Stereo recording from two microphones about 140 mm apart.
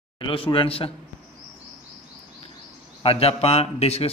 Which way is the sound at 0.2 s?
40° left (ahead or behind).